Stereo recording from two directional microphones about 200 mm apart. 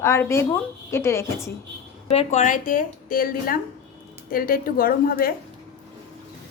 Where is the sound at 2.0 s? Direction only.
35° left (ahead or behind).